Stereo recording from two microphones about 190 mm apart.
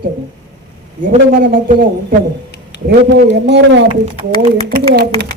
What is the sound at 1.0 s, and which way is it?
A man's voice, 45° right (ahead or behind).